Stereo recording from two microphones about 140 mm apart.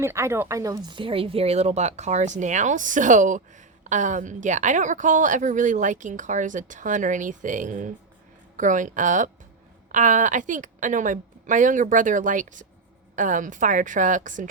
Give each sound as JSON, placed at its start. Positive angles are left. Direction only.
{"t": 0.0, "sound": "a woman's voice", "side_deg": -20}